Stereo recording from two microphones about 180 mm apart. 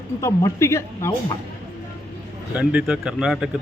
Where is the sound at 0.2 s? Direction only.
15° left (ahead or behind).